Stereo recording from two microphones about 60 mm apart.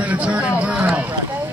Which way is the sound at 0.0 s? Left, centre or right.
Right.